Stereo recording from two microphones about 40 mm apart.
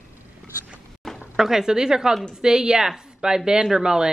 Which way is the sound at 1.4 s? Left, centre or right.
Centre.